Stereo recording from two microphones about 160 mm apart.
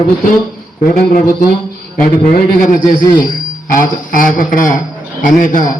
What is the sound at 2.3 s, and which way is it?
A man's voice, 60° left (ahead or behind).